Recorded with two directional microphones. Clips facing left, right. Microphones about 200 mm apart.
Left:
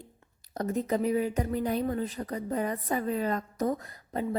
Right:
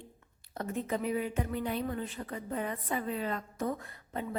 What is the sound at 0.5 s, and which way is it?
Speech, 40° left (ahead or behind).